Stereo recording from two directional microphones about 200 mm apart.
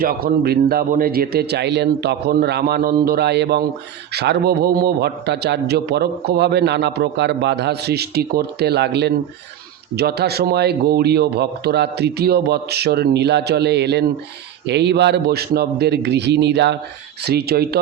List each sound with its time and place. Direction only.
0.0 s a man's voice: 45° right (ahead or behind)